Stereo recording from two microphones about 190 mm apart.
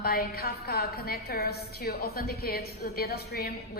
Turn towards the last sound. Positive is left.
turn(degrees=55)  # may be behind; listen again after turning